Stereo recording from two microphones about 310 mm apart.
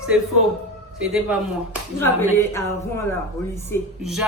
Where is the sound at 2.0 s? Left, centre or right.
Centre.